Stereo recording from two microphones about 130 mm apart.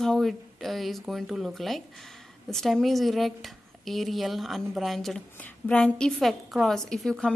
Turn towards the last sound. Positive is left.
turn(degrees=5)  # may be behind; listen again after turning